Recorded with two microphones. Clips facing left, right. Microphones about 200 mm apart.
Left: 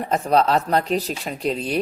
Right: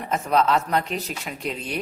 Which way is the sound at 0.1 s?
35° left (ahead or behind).